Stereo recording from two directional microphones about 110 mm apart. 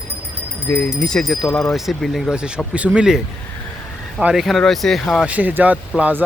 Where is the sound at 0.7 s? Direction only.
15° left (ahead or behind); by 3.2 s 10° right (ahead or behind).